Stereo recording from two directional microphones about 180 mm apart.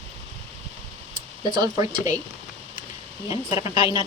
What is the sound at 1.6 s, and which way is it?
Speech, 20° right (ahead or behind).